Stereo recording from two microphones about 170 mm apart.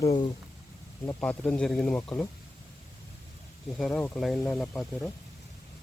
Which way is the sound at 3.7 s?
Centre (ahead or behind).